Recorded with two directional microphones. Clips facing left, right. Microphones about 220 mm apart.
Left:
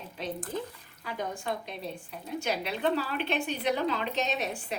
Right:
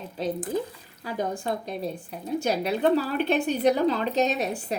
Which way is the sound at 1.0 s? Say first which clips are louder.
Right 5 dB; 35° right (ahead or behind).